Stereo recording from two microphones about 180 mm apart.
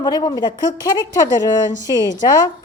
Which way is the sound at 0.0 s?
25° left (ahead or behind).